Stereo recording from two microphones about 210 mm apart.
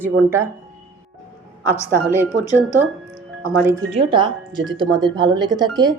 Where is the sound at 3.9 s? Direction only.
25° right (ahead or behind).